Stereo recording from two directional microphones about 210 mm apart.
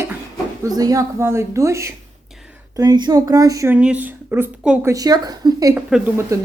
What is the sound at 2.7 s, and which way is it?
A woman's voice, 15° right (ahead or behind).